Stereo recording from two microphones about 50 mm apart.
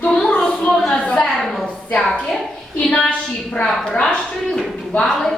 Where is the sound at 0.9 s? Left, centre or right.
Centre.